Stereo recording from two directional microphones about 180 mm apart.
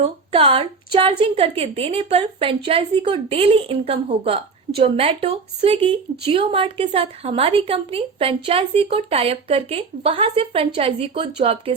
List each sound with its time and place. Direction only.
0.0 s a woman's voice: 30° right (ahead or behind)